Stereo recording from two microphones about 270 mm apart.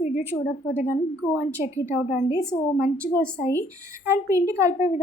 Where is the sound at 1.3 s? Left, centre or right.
Centre.